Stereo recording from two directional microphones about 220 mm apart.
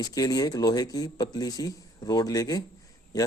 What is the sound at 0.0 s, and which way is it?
A man's voice, 15° left (ahead or behind).